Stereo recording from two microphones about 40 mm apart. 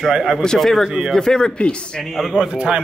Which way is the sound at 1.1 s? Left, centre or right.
Centre.